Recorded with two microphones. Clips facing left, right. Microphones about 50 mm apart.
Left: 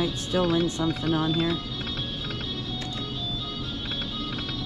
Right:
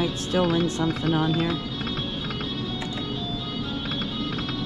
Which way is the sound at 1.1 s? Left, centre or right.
Right.